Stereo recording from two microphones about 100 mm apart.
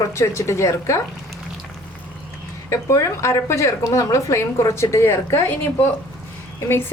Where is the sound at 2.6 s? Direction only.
30° left (ahead or behind).